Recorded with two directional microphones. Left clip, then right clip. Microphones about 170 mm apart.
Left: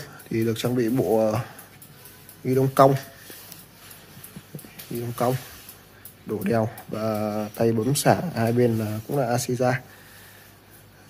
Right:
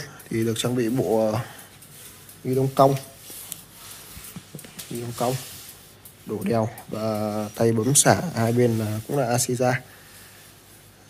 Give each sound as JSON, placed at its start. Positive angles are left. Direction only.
{"t": 0.0, "sound": "speech", "side_deg": 15}
{"t": 2.6, "sound": "speech", "side_deg": 40}
{"t": 5.0, "sound": "speech", "side_deg": 35}
{"t": 6.4, "sound": "speech", "side_deg": 10}